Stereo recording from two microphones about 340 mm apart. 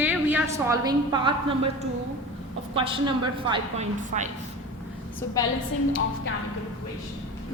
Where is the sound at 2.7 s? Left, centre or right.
Centre.